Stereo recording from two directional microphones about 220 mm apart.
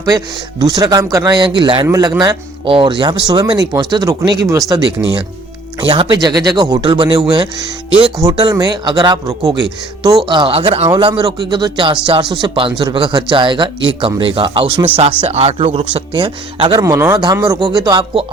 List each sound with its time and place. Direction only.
0.6 s speech: 15° right (ahead or behind)